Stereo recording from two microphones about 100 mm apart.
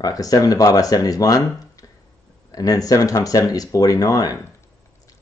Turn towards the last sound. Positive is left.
turn(degrees=35)  # may be behind; listen again after turning